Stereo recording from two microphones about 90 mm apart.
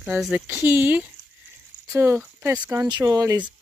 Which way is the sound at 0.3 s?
20° right (ahead or behind).